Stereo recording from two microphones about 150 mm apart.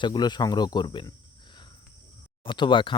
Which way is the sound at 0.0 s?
30° left (ahead or behind).